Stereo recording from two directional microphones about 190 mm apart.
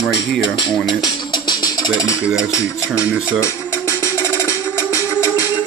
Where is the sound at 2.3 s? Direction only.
15° left (ahead or behind).